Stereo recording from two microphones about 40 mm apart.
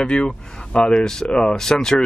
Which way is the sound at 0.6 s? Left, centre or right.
Centre.